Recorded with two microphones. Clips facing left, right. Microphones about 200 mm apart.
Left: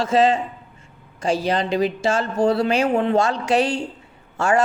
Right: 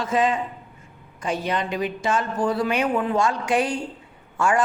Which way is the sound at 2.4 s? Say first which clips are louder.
Left 6 dB; 70° left (ahead or behind).